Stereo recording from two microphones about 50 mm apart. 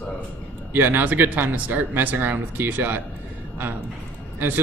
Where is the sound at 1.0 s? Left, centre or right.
Right.